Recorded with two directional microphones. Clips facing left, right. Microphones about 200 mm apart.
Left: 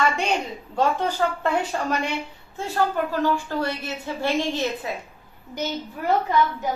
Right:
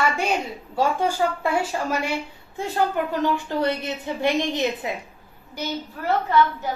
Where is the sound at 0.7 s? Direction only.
10° right (ahead or behind).